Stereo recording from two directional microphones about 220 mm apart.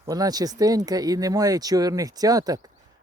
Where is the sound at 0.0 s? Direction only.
15° right (ahead or behind).